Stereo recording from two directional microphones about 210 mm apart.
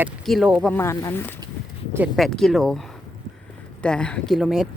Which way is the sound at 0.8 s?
10° left (ahead or behind).